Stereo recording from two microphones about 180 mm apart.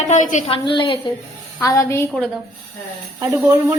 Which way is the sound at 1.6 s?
15° left (ahead or behind).